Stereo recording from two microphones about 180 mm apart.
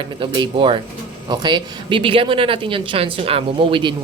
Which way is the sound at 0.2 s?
30° right (ahead or behind).